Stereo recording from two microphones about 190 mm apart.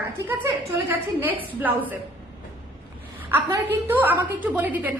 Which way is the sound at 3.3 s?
10° right (ahead or behind).